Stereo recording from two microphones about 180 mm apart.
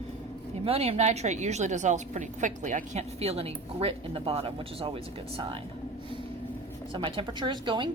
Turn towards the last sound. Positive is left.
turn(degrees=-25)  # may be behind; listen again after turning